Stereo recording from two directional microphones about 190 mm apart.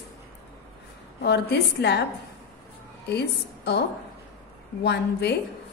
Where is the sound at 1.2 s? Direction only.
60° left (ahead or behind).